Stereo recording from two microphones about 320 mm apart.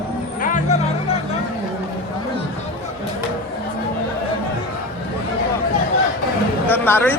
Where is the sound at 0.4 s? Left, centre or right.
Left.